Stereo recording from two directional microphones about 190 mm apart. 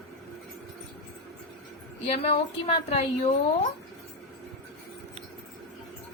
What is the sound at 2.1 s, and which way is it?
Speech, 30° left (ahead or behind).